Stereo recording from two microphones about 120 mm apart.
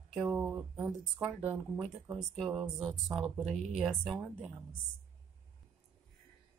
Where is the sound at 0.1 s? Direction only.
Centre (ahead or behind).